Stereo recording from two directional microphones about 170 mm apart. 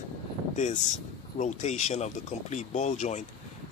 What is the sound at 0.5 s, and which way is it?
Speech, 45° left (ahead or behind).